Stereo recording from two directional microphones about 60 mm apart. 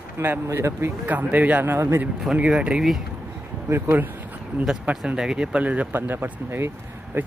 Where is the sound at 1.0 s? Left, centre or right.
Right.